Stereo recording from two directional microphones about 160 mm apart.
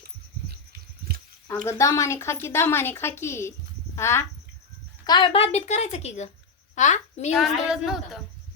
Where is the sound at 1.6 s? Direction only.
20° left (ahead or behind).